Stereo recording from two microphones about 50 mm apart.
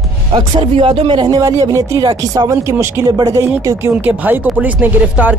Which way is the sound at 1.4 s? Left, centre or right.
Right.